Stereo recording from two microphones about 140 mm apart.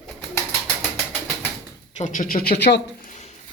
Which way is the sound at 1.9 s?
65° left (ahead or behind).